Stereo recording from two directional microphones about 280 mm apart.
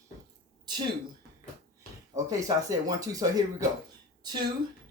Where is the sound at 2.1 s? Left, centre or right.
Centre.